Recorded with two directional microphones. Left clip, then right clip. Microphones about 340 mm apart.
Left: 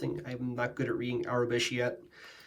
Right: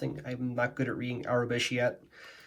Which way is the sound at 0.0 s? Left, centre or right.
Centre.